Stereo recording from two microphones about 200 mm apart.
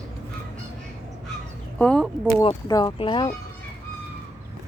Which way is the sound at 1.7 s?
5° left (ahead or behind).